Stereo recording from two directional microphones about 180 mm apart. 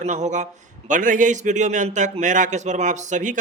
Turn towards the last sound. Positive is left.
turn(degrees=-45)  # may be behind; listen again after turning